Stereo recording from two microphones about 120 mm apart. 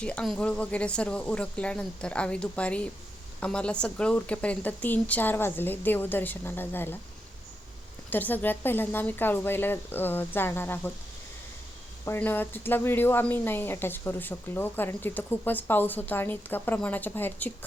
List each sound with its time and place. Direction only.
0.0 s speech: 10° left (ahead or behind)
8.1 s speech: 15° left (ahead or behind)
12.0 s speech: 20° left (ahead or behind)